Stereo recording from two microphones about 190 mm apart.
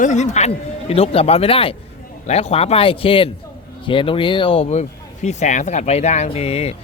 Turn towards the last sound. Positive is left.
turn(degrees=35)  # may be behind; listen again after turning